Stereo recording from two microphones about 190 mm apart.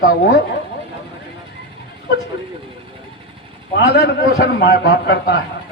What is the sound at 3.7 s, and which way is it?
A man's voice, 60° left (ahead or behind).